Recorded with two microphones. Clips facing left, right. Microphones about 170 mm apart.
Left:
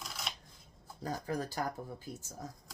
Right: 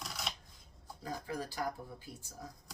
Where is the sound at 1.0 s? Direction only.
45° left (ahead or behind).